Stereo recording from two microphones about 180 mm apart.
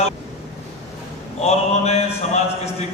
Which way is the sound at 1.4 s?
35° left (ahead or behind).